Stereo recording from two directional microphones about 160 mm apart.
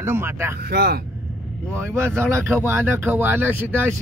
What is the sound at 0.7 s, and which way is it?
Speech, 80° right.